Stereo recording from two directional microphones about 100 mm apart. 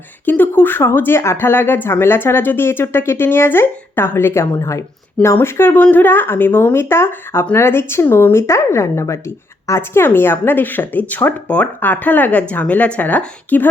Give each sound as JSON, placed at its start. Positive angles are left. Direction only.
{"t": 0.3, "sound": "speech", "side_deg": 20}